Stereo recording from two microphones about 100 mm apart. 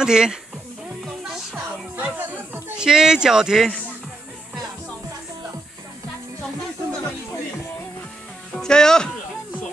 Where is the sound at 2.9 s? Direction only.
5° right (ahead or behind).